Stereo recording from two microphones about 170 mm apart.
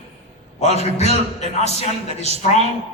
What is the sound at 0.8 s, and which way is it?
Speech, 40° left (ahead or behind).